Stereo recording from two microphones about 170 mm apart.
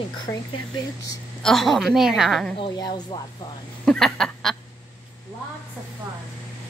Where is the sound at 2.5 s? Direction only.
25° left (ahead or behind).